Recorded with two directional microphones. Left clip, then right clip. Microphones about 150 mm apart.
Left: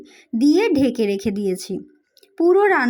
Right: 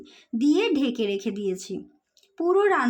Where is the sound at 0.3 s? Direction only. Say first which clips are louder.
Left 6 dB; 25° left (ahead or behind).